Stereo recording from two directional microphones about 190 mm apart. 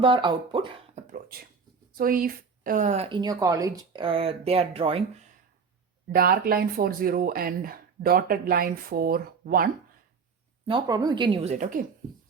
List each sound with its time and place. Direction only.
0.0 s speech: 25° right (ahead or behind)
0.9 s a woman's voice: 50° right (ahead or behind); by 5.2 s 30° right (ahead or behind)
6.1 s speech: 50° right (ahead or behind)
10.7 s speech: 20° right (ahead or behind); by 11.9 s 45° right (ahead or behind)